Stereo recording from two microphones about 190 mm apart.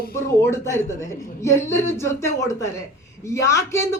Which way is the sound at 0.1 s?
15° left (ahead or behind).